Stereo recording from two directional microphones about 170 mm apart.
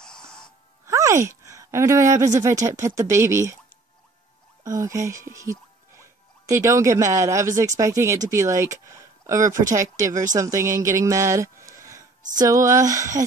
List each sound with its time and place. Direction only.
0.0 s music: 5° left (ahead or behind)
0.8 s music: 15° right (ahead or behind)
1.4 s speech: 20° right (ahead or behind)
4.6 s speech: 20° right (ahead or behind)